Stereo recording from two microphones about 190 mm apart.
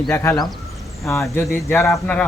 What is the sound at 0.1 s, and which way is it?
Speech, 15° left (ahead or behind).